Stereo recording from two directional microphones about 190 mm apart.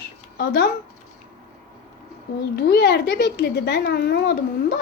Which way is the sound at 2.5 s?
60° left (ahead or behind).